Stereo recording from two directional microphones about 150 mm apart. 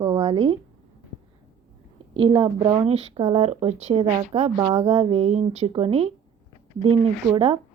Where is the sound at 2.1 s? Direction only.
35° right (ahead or behind).